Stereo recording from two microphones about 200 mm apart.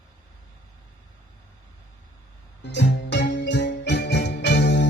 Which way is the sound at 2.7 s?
60° left (ahead or behind).